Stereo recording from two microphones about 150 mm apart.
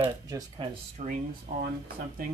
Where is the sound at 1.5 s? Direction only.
90° right.